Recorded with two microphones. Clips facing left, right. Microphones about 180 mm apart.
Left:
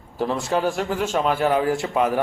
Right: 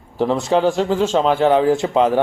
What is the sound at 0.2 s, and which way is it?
A man's voice, 20° right (ahead or behind).